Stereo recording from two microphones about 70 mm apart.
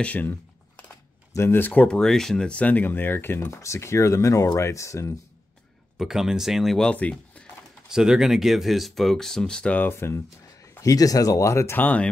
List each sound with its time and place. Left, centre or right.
0.0 s speech: left
1.3 s speech: left
1.7 s speech: centre; by 5.1 s left
5.9 s speech: centre
6.8 s speech: centre
7.9 s speech: centre
9.8 s speech: left
10.8 s speech: left
11.7 s speech: left